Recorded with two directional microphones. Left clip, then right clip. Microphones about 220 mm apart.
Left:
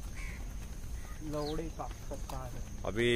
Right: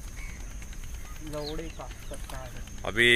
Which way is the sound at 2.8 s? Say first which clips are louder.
Right 9 dB; centre (ahead or behind).